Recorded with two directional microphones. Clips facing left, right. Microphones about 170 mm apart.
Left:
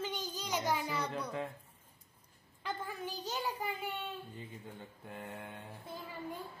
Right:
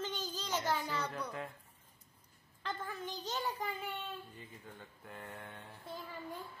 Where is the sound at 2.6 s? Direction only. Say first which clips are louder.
Left 1 dB; 10° left (ahead or behind).